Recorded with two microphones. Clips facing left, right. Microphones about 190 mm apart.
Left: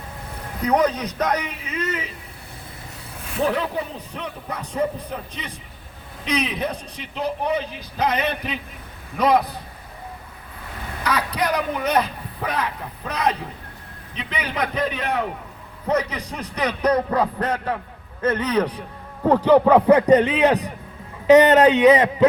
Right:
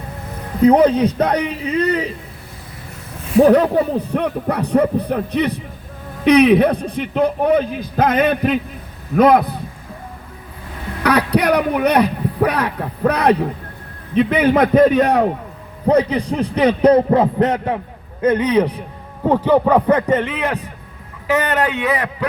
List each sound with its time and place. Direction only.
0.6 s a man's voice: 30° right (ahead or behind)
3.4 s a man's voice: 45° right (ahead or behind)
11.0 s a man's voice: 65° right (ahead or behind)
14.2 s a man's voice: 50° right (ahead or behind)
15.9 s a man's voice: 30° right (ahead or behind); by 19.7 s 10° right (ahead or behind)
19.7 s a man's voice: 10° left (ahead or behind)